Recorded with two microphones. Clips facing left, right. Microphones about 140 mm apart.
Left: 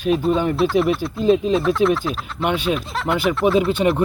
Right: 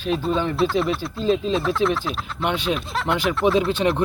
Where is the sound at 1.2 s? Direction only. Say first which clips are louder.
Left 4 dB; 15° left (ahead or behind).